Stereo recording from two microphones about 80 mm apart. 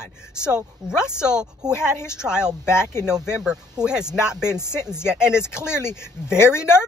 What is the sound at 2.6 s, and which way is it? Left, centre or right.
Speech, left.